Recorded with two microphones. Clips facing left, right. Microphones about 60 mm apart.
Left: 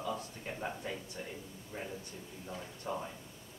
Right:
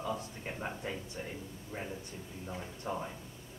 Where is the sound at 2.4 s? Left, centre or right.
Centre.